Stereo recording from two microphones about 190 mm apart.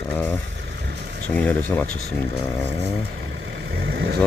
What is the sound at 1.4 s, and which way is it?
Speech, 10° left (ahead or behind).